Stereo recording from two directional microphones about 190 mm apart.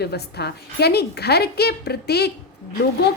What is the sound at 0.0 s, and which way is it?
A woman's voice, 60° left (ahead or behind).